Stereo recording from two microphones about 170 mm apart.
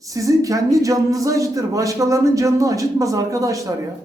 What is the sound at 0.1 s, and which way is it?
Speech, 20° right (ahead or behind).